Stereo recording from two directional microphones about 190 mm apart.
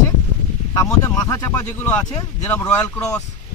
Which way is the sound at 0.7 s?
20° left (ahead or behind).